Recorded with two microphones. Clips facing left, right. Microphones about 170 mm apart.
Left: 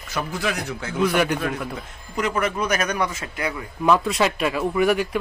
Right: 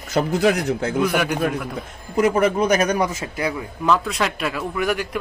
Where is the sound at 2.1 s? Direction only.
45° right (ahead or behind).